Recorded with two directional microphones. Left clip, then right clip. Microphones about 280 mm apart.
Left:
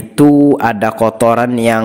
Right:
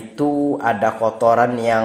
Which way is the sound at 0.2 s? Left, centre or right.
Left.